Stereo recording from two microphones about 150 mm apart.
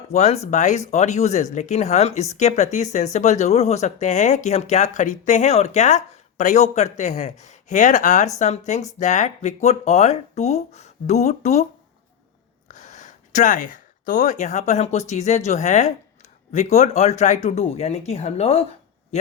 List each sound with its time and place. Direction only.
0.1 s speech: 50° left (ahead or behind)
12.6 s speech: 55° left (ahead or behind)